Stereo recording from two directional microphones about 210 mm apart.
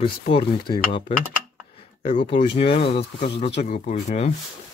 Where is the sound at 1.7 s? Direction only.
25° left (ahead or behind).